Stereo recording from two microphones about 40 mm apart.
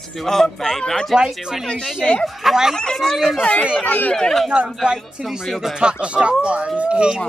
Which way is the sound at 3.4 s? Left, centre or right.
Left.